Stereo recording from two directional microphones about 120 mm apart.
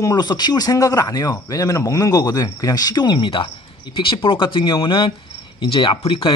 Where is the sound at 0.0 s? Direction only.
35° left (ahead or behind).